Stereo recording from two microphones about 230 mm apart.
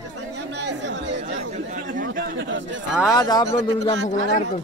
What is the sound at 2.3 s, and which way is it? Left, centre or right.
Speech, right.